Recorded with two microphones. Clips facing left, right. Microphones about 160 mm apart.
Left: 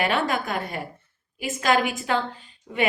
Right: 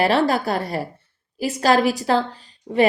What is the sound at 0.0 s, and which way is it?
Speech, 35° right (ahead or behind).